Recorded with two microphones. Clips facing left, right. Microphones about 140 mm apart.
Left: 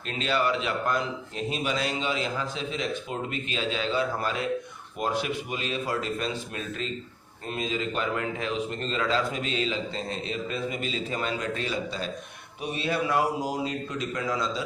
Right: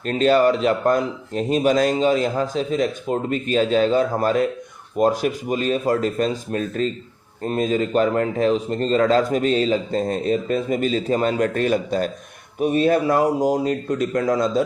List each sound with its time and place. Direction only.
0.0 s speech: 45° right (ahead or behind)